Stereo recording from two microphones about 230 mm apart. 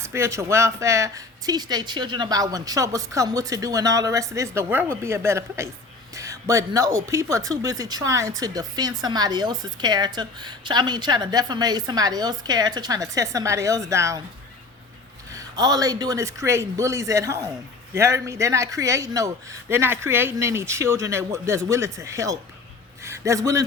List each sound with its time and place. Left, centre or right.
0.0 s speech: centre
15.5 s a man's voice: centre